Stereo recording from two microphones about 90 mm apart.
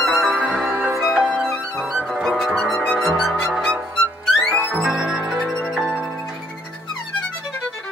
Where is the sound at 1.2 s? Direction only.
10° left (ahead or behind).